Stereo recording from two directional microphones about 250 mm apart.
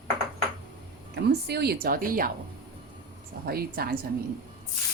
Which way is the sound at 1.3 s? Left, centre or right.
Right.